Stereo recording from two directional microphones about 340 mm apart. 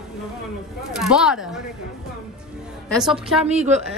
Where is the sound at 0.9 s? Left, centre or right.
Centre.